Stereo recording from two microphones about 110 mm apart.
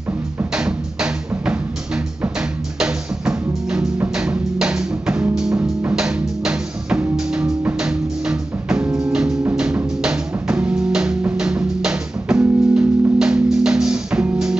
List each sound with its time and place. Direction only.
0.6 s music: 10° right (ahead or behind)
5.6 s music: 15° right (ahead or behind)
5.9 s music: 5° right (ahead or behind)